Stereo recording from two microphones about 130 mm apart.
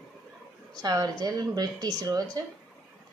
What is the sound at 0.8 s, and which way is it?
Speech, 30° right (ahead or behind).